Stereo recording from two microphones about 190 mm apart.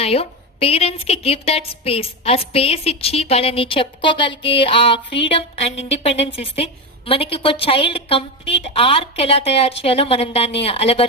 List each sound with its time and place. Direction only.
0.0 s a woman's voice: 30° left (ahead or behind)